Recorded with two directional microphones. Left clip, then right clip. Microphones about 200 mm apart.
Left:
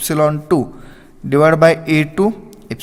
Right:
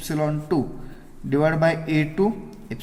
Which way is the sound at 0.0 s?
55° left (ahead or behind).